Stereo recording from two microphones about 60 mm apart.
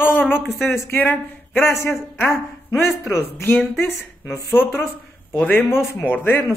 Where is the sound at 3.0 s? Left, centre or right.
Left.